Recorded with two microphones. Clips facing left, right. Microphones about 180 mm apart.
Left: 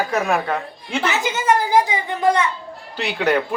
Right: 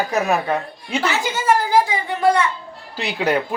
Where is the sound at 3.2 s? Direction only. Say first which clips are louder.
Left 1 dB; 10° right (ahead or behind).